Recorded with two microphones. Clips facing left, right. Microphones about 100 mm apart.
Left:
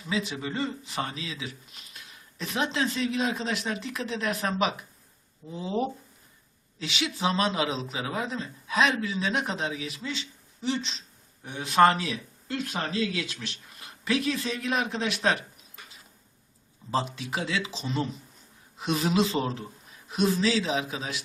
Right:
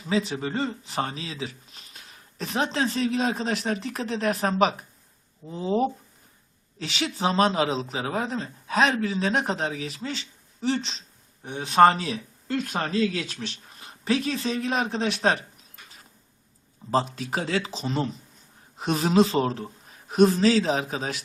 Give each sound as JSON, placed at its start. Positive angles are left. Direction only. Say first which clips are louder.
{"t": 0.1, "sound": "speech", "louder": "right 5 dB", "side_deg": -35}
{"t": 11.4, "sound": "speech", "louder": "right 3 dB", "side_deg": -30}
{"t": 12.6, "sound": "a man's voice", "louder": "right 4 dB", "side_deg": -50}
{"t": 13.4, "sound": "speech", "louder": "right 4 dB", "side_deg": -35}
{"t": 16.9, "sound": "a man's voice", "louder": "right 4 dB", "side_deg": -40}